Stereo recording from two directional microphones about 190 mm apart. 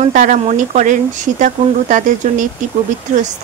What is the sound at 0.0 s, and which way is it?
Speech, 40° right (ahead or behind).